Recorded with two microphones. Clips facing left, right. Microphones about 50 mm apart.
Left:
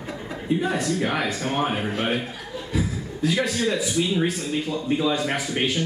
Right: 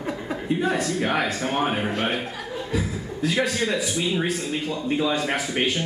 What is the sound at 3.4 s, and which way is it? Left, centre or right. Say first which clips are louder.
Speech: right 2 dB; right.